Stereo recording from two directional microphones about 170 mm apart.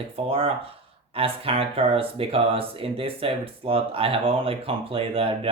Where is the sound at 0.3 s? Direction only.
35° right (ahead or behind).